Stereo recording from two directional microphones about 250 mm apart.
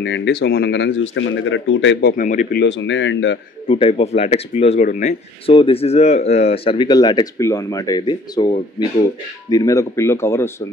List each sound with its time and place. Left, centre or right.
0.0 s speech: left
2.6 s speech: left
3.6 s speech: left